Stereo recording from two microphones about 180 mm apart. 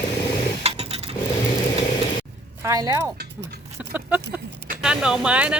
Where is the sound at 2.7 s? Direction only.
20° right (ahead or behind).